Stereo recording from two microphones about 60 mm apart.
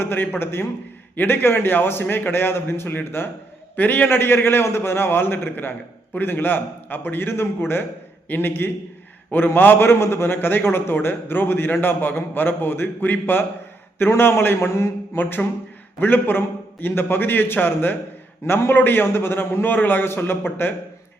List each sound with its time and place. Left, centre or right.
0.0 s a man's voice: left